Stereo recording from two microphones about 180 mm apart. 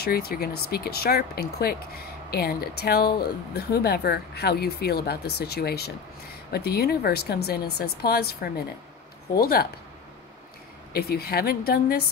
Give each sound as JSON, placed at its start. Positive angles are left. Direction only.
{"t": 0.0, "sound": "speech", "side_deg": 60}
{"t": 10.9, "sound": "speech", "side_deg": 60}